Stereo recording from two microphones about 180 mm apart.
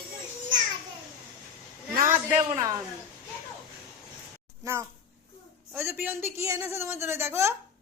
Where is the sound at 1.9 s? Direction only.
45° right (ahead or behind).